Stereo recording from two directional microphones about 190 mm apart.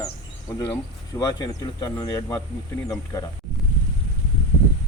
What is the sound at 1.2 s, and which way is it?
Speech, 20° left (ahead or behind).